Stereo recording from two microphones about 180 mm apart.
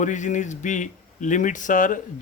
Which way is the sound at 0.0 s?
45° left (ahead or behind).